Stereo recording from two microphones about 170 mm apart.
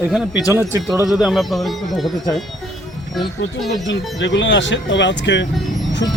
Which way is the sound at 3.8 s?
90° left.